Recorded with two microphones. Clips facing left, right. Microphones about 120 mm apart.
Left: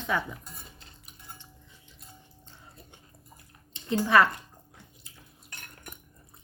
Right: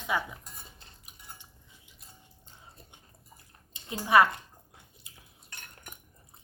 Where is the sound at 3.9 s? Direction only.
15° right (ahead or behind).